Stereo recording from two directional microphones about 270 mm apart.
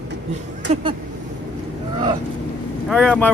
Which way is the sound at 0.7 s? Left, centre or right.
Right.